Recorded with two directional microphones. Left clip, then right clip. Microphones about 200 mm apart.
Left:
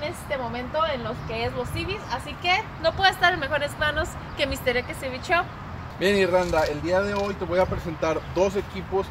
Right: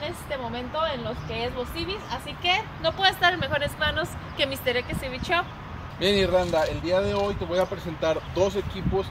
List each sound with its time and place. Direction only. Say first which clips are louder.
0.0 s a woman's voice: left 2 dB; 10° right (ahead or behind)
5.9 s speech: left 1 dB; 15° left (ahead or behind)